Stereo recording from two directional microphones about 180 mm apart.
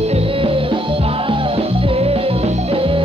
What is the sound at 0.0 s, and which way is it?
Music, 35° right (ahead or behind).